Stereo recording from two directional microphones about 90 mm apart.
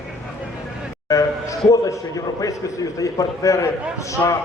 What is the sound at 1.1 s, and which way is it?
A man's voice, 40° left (ahead or behind).